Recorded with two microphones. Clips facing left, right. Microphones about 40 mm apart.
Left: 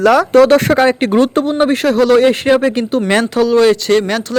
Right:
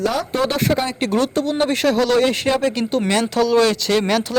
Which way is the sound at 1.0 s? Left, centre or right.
Left.